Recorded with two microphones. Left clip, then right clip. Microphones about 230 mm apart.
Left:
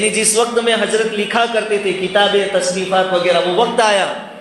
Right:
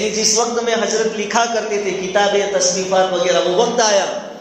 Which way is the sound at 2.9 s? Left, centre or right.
Left.